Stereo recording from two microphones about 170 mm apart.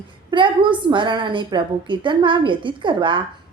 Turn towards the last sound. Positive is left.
turn(degrees=-30)  # may be behind; listen again after turning